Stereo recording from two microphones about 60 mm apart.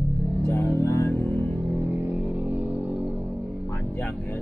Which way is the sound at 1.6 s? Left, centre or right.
Right.